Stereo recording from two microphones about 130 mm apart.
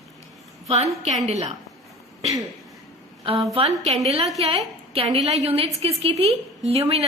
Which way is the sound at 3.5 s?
50° right (ahead or behind).